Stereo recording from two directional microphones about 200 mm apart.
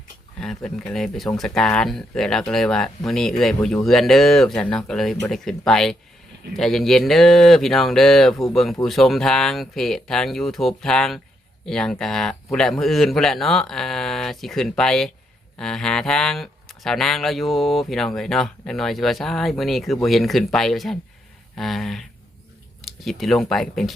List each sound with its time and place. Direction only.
0.3 s speech: centre (ahead or behind)